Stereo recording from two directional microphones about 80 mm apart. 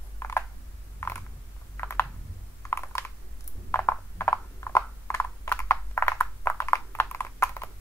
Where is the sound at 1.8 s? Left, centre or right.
Left.